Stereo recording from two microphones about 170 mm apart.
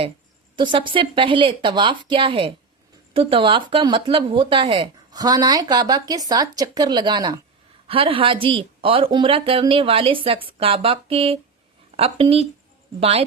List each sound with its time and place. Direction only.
0.5 s speech: 30° right (ahead or behind)